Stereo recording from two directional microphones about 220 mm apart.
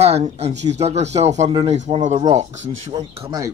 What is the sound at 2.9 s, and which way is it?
Speech, 20° right (ahead or behind).